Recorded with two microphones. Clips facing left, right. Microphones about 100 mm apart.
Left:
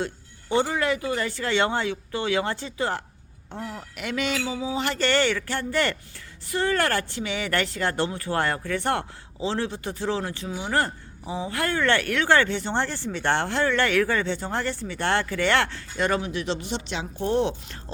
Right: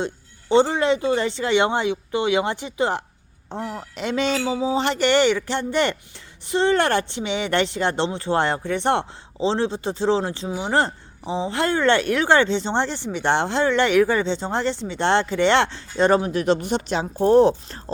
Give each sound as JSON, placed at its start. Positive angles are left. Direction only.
{"t": 0.0, "sound": "speech", "side_deg": -25}